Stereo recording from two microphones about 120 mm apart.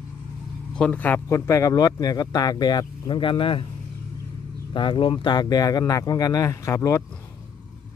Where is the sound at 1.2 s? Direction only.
25° left (ahead or behind); by 3.6 s 45° left (ahead or behind).